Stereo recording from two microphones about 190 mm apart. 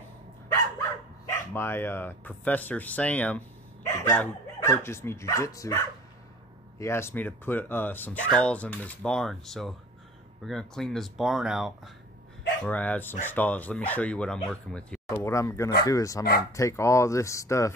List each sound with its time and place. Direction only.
1.3 s speech: 15° left (ahead or behind)